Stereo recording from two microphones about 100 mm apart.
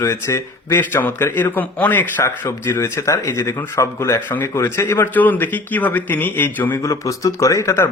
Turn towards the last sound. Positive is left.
turn(degrees=30)  # may be behind; listen again after turning